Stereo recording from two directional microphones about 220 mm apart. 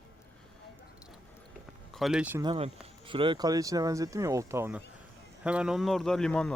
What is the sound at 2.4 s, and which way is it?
Speech, 20° right (ahead or behind).